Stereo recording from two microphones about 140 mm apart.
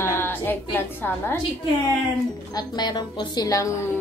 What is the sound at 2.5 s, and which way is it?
A woman's voice, 30° left (ahead or behind).